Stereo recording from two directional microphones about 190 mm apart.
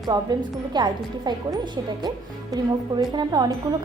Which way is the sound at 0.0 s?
20° right (ahead or behind).